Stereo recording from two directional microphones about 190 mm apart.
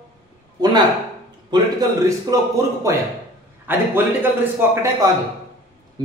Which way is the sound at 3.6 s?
10° right (ahead or behind).